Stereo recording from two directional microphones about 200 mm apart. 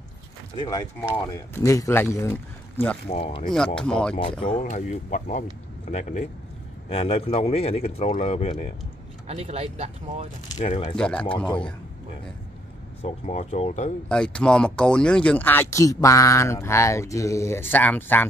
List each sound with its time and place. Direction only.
0.6 s speech: 20° left (ahead or behind)
3.1 s speech: 30° left (ahead or behind)
3.5 s speech: 5° left (ahead or behind)
4.4 s speech: 30° left (ahead or behind)
9.3 s speech: 30° right (ahead or behind)
10.6 s speech: 35° left (ahead or behind)
11.0 s speech: 5° left (ahead or behind)
13.0 s speech: 35° left (ahead or behind)
14.0 s speech: 5° left (ahead or behind)